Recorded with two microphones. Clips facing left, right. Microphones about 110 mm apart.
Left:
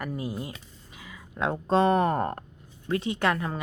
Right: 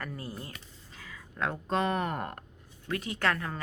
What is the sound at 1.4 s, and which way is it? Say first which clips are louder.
Speech: left 7 dB; 25° left (ahead or behind).